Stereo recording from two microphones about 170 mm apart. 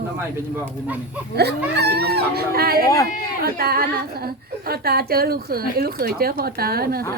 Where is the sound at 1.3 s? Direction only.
75° right (ahead or behind).